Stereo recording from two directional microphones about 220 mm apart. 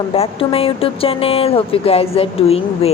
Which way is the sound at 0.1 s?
25° left (ahead or behind).